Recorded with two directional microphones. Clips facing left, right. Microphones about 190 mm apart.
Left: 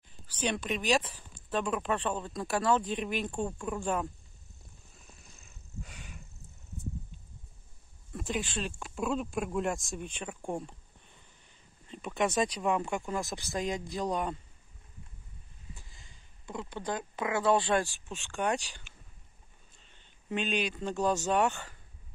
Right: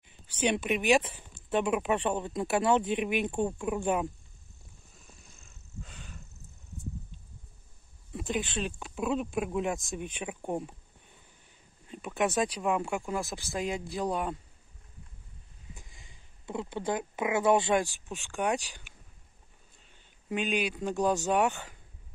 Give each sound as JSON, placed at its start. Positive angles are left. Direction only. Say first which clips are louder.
{"t": 0.3, "sound": "a sound", "louder": "right 4 dB", "side_deg": -25}
{"t": 0.6, "sound": "speech", "louder": "right 4 dB", "side_deg": -15}
{"t": 5.8, "sound": "a sound", "louder": "even", "side_deg": 10}
{"t": 8.1, "sound": "speech", "louder": "right 2 dB", "side_deg": 0}
{"t": 11.9, "sound": "speech", "louder": "right 1 dB", "side_deg": -5}
{"t": 15.7, "sound": "speech", "louder": "right 1 dB", "side_deg": -20}